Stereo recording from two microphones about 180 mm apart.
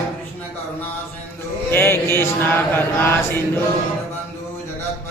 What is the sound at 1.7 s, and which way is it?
Chant, 10° left (ahead or behind).